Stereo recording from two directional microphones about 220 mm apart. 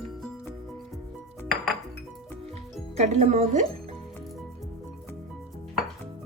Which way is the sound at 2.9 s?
30° right (ahead or behind).